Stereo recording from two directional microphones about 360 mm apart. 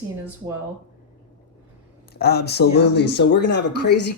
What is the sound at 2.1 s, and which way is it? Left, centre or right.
Speech, left.